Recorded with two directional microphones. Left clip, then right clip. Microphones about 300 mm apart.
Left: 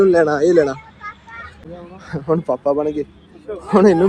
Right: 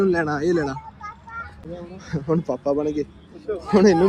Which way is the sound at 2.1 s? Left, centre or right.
Left.